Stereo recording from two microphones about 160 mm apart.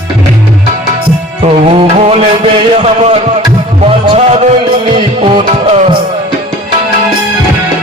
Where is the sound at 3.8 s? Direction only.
40° right (ahead or behind).